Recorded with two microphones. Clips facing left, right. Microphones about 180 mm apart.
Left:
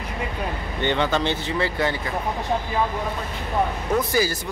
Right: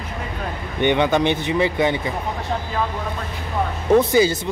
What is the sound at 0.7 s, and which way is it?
Speech, 15° right (ahead or behind).